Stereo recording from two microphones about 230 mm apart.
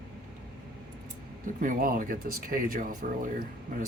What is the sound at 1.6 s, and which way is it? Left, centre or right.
Speech, right.